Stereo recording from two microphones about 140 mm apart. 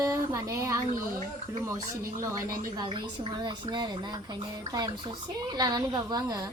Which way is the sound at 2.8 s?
35° right (ahead or behind).